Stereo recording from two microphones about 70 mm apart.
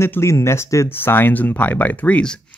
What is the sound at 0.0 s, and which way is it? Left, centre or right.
Speech, left.